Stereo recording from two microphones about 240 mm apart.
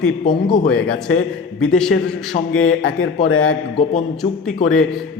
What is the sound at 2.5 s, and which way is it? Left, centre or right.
Speech, left.